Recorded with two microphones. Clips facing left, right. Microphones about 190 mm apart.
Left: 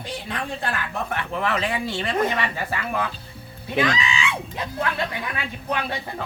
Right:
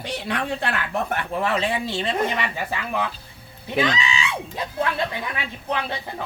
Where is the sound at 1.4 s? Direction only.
25° right (ahead or behind).